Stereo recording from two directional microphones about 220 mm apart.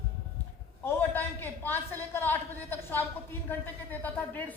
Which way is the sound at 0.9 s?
10° left (ahead or behind).